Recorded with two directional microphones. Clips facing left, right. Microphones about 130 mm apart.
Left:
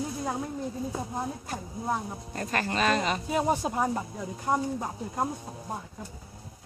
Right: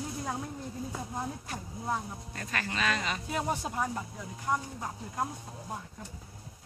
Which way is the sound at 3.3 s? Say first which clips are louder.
Left 6 dB; 25° left (ahead or behind).